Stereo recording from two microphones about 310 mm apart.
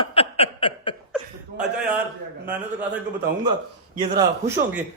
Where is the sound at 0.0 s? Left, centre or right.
Centre.